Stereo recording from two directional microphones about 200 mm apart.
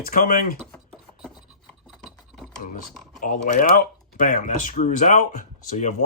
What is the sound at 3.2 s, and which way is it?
Speech, 40° left (ahead or behind).